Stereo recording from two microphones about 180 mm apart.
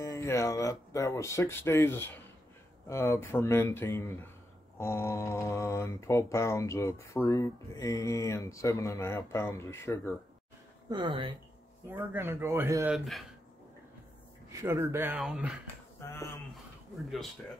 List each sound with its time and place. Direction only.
0.0 s speech: 20° left (ahead or behind)
10.9 s speech: 25° right (ahead or behind)
11.9 s speech: 10° right (ahead or behind)
12.8 s speech: centre (ahead or behind)
14.5 s speech: 20° right (ahead or behind)
16.0 s a sound: 15° left (ahead or behind)